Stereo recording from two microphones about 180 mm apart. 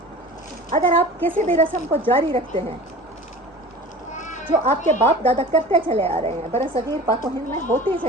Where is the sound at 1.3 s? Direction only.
35° right (ahead or behind).